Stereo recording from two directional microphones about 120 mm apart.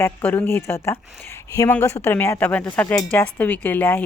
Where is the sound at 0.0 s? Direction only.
15° left (ahead or behind).